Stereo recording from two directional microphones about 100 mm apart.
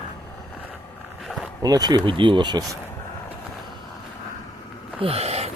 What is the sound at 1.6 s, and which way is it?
Speech, 40° right (ahead or behind).